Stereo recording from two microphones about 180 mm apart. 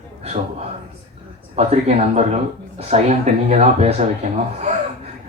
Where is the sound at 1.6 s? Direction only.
35° right (ahead or behind).